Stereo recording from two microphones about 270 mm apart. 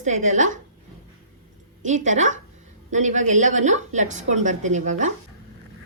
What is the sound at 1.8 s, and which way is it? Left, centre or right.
A woman's voice, right.